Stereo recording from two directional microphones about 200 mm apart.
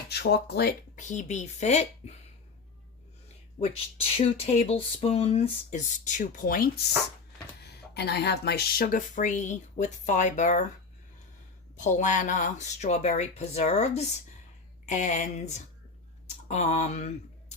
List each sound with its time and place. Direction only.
0.1 s speech: 55° left (ahead or behind); by 2.1 s 35° left (ahead or behind)
3.6 s speech: 30° left (ahead or behind)
7.6 s speech: 55° left (ahead or behind); by 10.7 s 35° left (ahead or behind)
11.8 s speech: 40° left (ahead or behind)